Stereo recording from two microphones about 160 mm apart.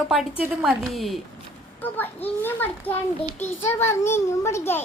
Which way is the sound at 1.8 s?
10° left (ahead or behind).